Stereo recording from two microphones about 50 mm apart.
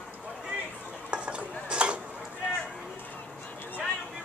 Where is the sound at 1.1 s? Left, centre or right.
Right.